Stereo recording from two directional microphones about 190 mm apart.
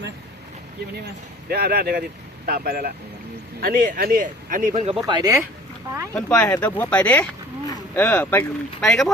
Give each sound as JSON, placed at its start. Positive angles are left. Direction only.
{"t": 1.0, "sound": "speech", "side_deg": -55}
{"t": 5.0, "sound": "speech", "side_deg": -20}
{"t": 6.1, "sound": "speech", "side_deg": 10}